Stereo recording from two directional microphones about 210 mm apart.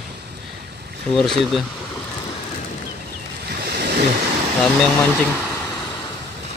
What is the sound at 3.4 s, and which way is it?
Ocean, 50° right (ahead or behind).